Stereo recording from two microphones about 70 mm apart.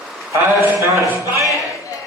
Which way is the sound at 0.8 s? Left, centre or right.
Right.